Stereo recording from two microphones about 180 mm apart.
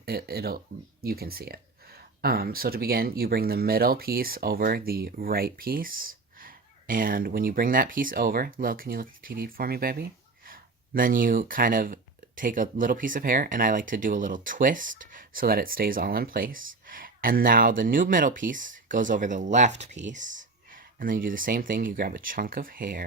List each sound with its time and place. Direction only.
0.0 s speech: 60° right (ahead or behind)